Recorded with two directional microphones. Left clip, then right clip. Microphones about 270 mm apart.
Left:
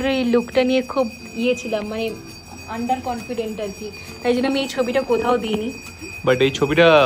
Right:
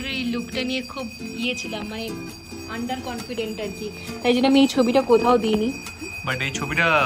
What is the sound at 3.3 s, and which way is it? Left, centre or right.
Speech, right.